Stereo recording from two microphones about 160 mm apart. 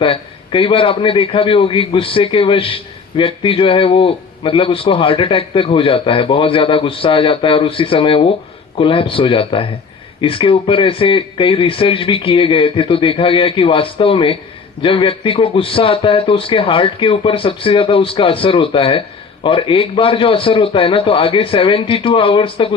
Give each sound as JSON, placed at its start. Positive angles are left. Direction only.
{"t": 0.0, "sound": "a man's voice", "side_deg": 35}